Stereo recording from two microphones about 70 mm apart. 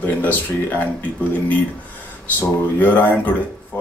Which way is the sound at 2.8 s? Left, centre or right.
Left.